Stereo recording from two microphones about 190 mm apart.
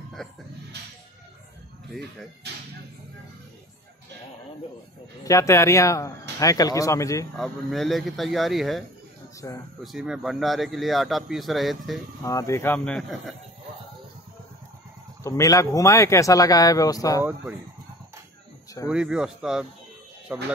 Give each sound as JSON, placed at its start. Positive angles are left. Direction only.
{"t": 0.2, "sound": "speech", "side_deg": 0}
{"t": 5.2, "sound": "speech", "side_deg": 15}
{"t": 7.3, "sound": "speech", "side_deg": 0}
{"t": 9.4, "sound": "speech", "side_deg": 15}
{"t": 9.8, "sound": "speech", "side_deg": 0}
{"t": 12.2, "sound": "speech", "side_deg": 15}
{"t": 15.2, "sound": "speech", "side_deg": 15}
{"t": 17.2, "sound": "speech", "side_deg": -10}
{"t": 18.9, "sound": "speech", "side_deg": -5}